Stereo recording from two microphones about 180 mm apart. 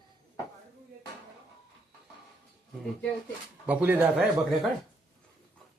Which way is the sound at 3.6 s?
10° right (ahead or behind).